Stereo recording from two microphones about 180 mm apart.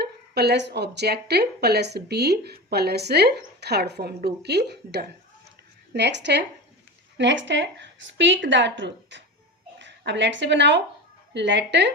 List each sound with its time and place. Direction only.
0.0 s a woman's voice: 65° right (ahead or behind); by 9.2 s 85° right
9.7 s a woman's voice: 75° right (ahead or behind)